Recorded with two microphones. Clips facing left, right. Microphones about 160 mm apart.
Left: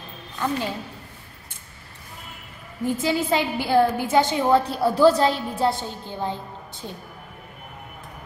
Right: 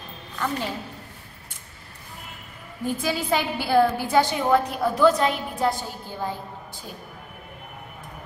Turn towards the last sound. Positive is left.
turn(degrees=20)  # may be behind; listen again after turning